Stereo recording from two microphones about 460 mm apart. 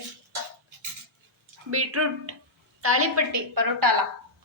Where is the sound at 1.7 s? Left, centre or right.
Right.